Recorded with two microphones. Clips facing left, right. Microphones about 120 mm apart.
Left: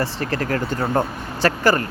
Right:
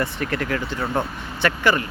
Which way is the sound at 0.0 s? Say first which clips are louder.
Left 1 dB; 35° left (ahead or behind).